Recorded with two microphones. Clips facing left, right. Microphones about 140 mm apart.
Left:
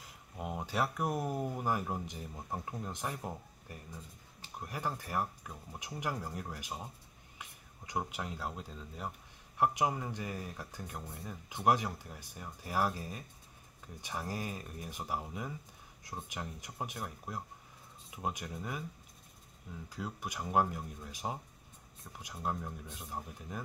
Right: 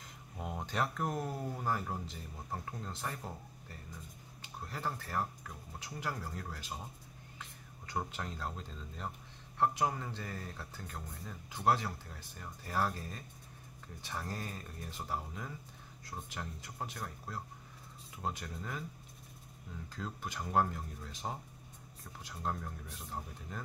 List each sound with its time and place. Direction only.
0.0 s speech: 5° left (ahead or behind)
4.6 s speech: 15° left (ahead or behind)
19.9 s speech: 10° left (ahead or behind)